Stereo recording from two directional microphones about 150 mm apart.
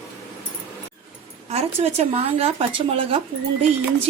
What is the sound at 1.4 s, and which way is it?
A woman's voice, 45° right (ahead or behind).